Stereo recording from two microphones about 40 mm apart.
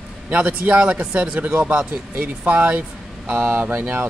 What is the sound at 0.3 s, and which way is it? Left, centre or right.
A man's voice, right.